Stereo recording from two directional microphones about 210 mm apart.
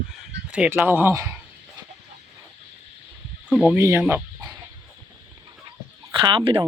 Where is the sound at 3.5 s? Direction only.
5° right (ahead or behind).